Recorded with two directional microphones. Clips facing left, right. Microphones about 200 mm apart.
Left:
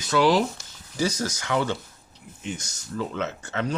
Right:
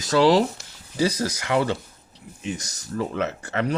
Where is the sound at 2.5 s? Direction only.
35° right (ahead or behind).